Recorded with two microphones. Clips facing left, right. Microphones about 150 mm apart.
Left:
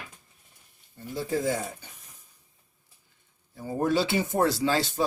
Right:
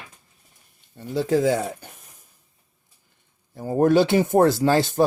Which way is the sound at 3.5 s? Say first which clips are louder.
Right 8 dB; 55° right (ahead or behind).